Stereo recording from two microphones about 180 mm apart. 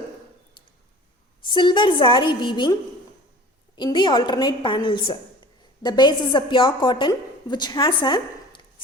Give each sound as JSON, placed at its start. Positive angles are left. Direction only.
{"t": 1.5, "sound": "a woman's voice", "side_deg": 25}
{"t": 3.8, "sound": "a woman's voice", "side_deg": 25}
{"t": 8.0, "sound": "a sound", "side_deg": 25}